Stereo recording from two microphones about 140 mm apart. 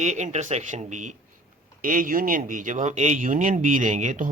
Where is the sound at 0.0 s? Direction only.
55° right (ahead or behind).